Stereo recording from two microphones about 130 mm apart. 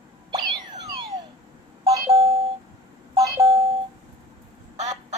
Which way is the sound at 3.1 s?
30° right (ahead or behind).